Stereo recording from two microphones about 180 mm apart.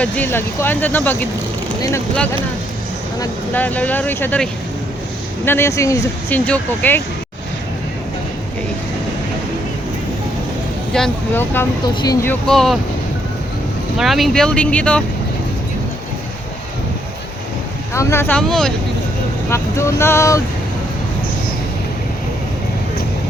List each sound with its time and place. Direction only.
0.0 s speech: 10° left (ahead or behind)
3.5 s speech: 10° left (ahead or behind)
5.5 s speech: 15° left (ahead or behind)
10.9 s speech: 5° left (ahead or behind)
14.0 s speech: centre (ahead or behind)
17.9 s speech: 15° left (ahead or behind)
19.5 s speech: 15° left (ahead or behind)